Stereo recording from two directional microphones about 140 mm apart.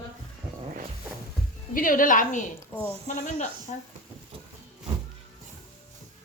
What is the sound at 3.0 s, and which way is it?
Speech, 60° left (ahead or behind).